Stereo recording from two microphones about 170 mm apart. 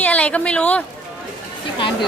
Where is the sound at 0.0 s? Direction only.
10° left (ahead or behind).